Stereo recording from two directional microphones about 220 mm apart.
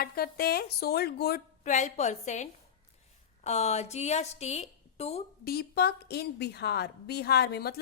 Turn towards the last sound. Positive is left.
turn(degrees=45)  # may be behind; listen again after turning